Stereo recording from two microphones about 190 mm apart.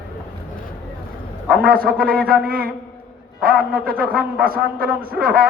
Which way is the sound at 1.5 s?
50° right (ahead or behind).